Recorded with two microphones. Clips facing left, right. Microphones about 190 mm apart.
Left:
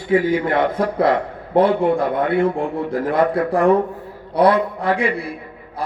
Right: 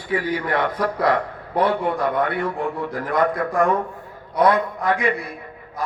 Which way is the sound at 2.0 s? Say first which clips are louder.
Left 4 dB; 50° left (ahead or behind).